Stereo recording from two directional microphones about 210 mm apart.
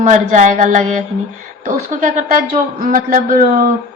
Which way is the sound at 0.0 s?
35° right (ahead or behind).